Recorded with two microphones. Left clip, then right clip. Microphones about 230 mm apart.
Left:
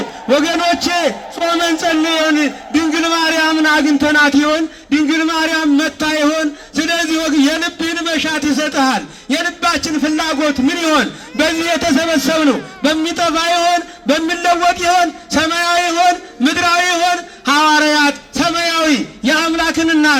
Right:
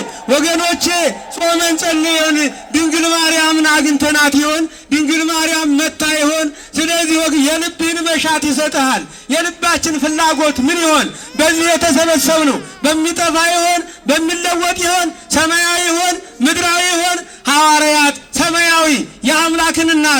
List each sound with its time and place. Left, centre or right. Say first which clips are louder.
0.3 s a man's voice: even; right
7.4 s a man's voice: right 1 dB; right
16.4 s a man's voice: right 1 dB; right
16.9 s a man's voice: left 1 dB; right
17.4 s a man's voice: right 1 dB; right
18.1 s a sound: right 1 dB; right
18.7 s a man's voice: right 2 dB; right
19.4 s a man's voice: right 4 dB; right